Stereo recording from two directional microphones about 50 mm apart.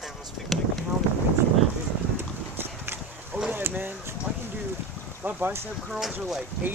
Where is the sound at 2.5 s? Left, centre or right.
Right.